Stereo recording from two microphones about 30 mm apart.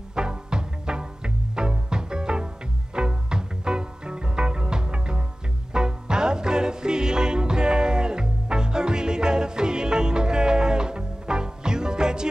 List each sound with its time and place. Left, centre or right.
0.1 s music: right